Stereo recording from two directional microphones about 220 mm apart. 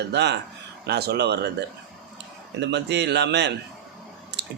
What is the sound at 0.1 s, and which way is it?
A man's voice, 50° right (ahead or behind).